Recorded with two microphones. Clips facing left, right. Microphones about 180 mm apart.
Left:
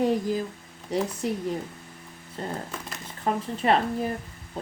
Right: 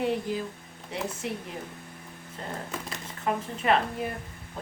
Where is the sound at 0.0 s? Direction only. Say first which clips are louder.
Left 4 dB; 40° left (ahead or behind).